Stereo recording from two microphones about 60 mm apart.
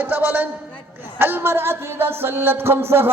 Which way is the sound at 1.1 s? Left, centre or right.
Right.